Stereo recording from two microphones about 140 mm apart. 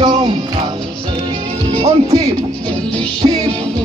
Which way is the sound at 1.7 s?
45° right (ahead or behind).